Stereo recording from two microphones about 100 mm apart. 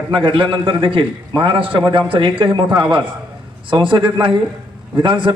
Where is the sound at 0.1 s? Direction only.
55° right (ahead or behind).